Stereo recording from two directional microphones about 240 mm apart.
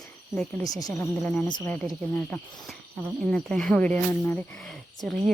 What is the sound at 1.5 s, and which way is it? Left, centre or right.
Speech, centre.